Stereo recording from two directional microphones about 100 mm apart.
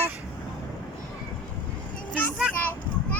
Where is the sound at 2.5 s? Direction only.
20° left (ahead or behind).